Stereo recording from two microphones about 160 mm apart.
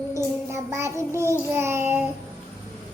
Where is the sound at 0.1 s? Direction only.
20° right (ahead or behind).